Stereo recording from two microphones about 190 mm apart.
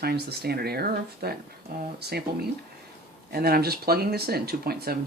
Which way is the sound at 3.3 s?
55° right (ahead or behind).